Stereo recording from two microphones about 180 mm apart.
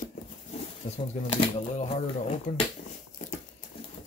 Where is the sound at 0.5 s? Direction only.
35° left (ahead or behind).